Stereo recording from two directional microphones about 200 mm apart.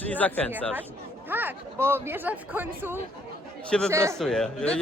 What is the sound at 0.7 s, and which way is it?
A man's voice, 10° right (ahead or behind).